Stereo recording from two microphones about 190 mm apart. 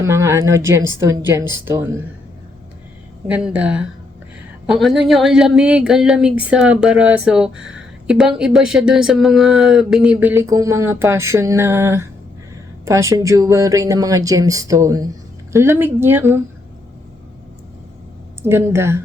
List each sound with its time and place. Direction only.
0.0 s speech: 15° right (ahead or behind)
3.2 s speech: 5° right (ahead or behind)
18.4 s speech: 15° right (ahead or behind)